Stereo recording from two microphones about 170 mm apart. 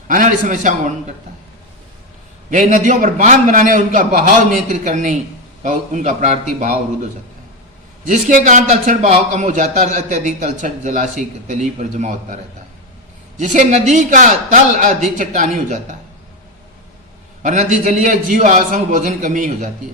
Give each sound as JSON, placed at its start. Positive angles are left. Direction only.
{"t": 0.1, "sound": "a man's voice", "side_deg": -50}
{"t": 2.5, "sound": "a man's voice", "side_deg": -50}
{"t": 13.4, "sound": "a man's voice", "side_deg": -45}
{"t": 17.4, "sound": "a man's voice", "side_deg": -45}